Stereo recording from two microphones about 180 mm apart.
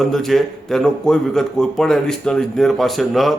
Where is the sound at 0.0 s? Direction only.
Centre (ahead or behind).